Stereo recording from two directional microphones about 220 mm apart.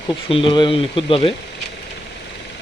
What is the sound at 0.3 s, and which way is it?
Speech, 25° left (ahead or behind).